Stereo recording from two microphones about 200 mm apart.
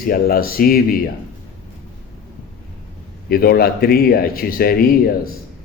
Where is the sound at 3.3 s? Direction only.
50° left (ahead or behind).